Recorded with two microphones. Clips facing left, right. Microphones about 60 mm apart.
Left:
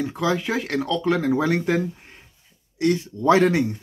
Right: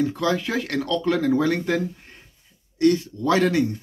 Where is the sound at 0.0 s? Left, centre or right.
Centre.